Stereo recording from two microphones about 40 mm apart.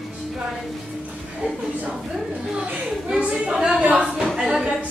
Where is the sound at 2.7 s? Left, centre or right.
Right.